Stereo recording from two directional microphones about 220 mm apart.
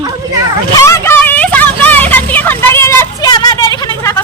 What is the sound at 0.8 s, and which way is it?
Vehicle, 15° left (ahead or behind).